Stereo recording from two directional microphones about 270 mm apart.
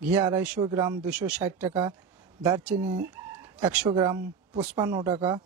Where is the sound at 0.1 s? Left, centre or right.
Centre.